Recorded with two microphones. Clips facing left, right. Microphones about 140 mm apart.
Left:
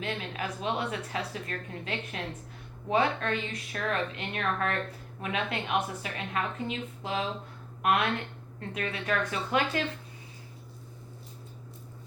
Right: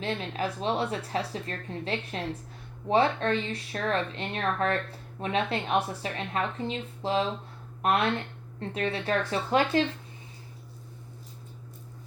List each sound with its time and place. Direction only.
0.0 s speech: 30° right (ahead or behind)